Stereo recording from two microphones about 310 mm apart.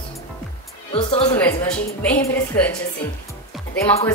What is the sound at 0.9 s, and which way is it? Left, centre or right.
Speech, centre.